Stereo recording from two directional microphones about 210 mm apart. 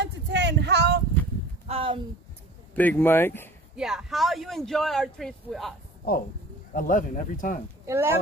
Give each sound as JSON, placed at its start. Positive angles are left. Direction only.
{"t": 0.0, "sound": "a sound", "side_deg": -55}
{"t": 1.7, "sound": "a sound", "side_deg": -25}
{"t": 2.7, "sound": "speech", "side_deg": 10}
{"t": 3.7, "sound": "speech", "side_deg": 0}
{"t": 6.1, "sound": "speech", "side_deg": 45}
{"t": 7.8, "sound": "speech", "side_deg": -10}